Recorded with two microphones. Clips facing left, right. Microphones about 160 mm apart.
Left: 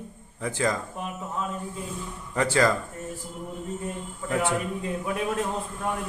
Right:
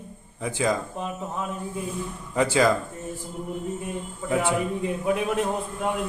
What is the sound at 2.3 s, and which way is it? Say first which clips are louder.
Speech: right 2 dB; 15° right (ahead or behind).